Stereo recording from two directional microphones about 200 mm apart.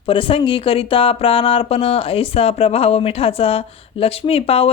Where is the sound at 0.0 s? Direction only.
25° left (ahead or behind).